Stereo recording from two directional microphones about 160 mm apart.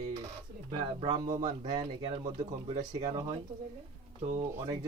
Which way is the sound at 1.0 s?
25° right (ahead or behind).